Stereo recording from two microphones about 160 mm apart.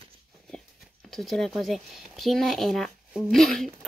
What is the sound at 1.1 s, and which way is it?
Speech, centre (ahead or behind).